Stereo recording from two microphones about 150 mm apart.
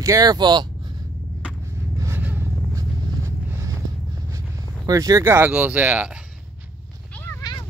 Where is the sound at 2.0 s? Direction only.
15° right (ahead or behind).